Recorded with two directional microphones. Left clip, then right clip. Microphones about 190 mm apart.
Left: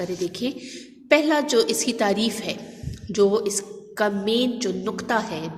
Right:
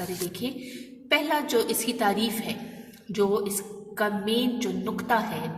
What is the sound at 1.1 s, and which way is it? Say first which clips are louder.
A woman's voice: left 5 dB; 30° left (ahead or behind).